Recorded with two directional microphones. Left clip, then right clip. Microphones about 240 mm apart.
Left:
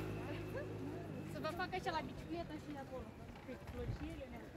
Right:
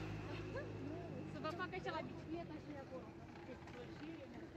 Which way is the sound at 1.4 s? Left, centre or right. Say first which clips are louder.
Left 3 dB; left.